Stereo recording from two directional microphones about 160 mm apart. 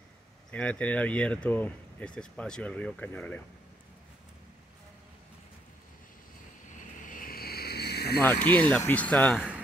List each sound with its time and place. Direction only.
0.5 s speech: 10° left (ahead or behind)
7.0 s vehicle: 60° left (ahead or behind); by 8.2 s 85° left
8.5 s speech: 10° left (ahead or behind)